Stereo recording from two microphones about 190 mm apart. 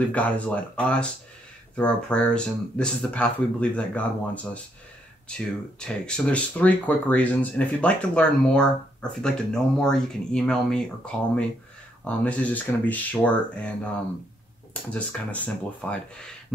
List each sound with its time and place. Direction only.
0.1 s speech: 5° left (ahead or behind)
5.8 s speech: 5° left (ahead or behind)